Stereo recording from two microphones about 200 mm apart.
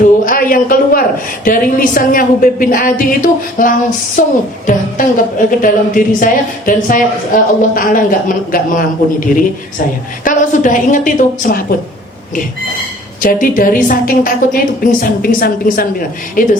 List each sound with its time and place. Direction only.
0.3 s speech: 45° left (ahead or behind)
10.2 s a woman's voice: 40° left (ahead or behind)
13.2 s speech: 45° left (ahead or behind)